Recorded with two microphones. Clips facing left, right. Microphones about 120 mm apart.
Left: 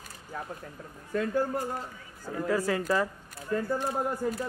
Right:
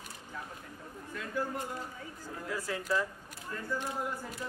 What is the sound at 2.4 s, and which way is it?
Speech, 75° left (ahead or behind).